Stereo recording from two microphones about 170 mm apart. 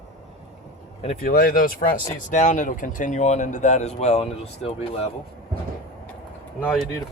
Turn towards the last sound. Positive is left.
turn(degrees=10)  # may be behind; listen again after turning